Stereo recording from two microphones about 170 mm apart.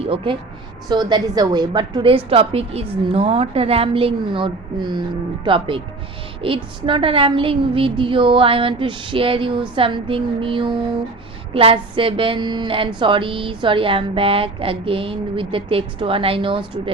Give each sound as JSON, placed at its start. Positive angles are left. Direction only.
{"t": 0.0, "sound": "a woman's voice", "side_deg": -35}